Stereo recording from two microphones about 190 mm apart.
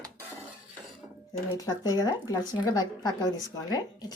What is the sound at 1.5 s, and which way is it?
A woman's voice, 20° left (ahead or behind).